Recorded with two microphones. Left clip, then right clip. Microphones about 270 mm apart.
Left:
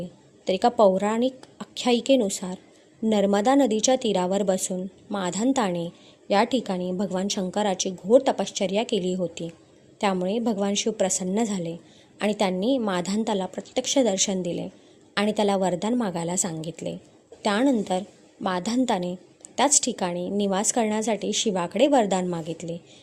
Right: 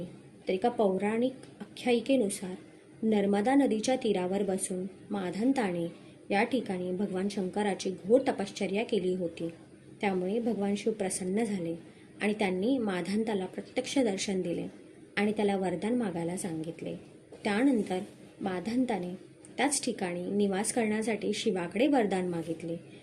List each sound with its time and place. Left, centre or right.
0.4 s a woman's voice: left